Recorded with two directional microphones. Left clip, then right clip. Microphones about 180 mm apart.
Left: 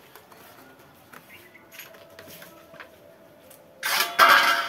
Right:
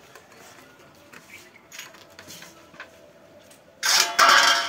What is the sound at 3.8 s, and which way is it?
Printer, 65° right (ahead or behind).